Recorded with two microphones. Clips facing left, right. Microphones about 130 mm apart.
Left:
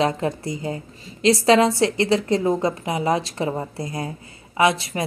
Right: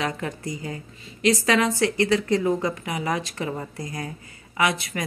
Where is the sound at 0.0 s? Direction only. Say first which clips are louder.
Left 7 dB; 30° left (ahead or behind).